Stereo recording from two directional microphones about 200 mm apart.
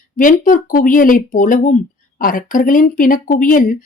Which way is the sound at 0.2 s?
40° left (ahead or behind).